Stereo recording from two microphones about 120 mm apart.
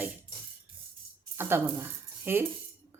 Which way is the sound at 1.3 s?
20° right (ahead or behind).